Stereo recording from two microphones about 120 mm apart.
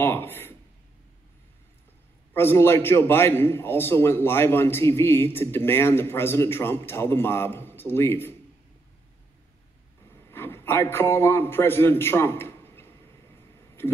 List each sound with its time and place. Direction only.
0.0 s a sound: 20° left (ahead or behind)
2.3 s a man's voice: 20° left (ahead or behind)
10.3 s a man's voice: 20° left (ahead or behind)